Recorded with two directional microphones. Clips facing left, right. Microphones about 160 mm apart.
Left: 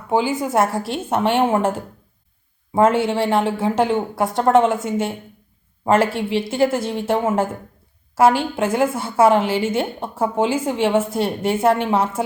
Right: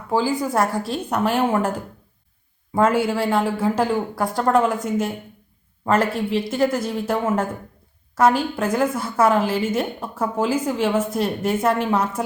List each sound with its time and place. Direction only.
0.4 s a woman's voice: 25° left (ahead or behind)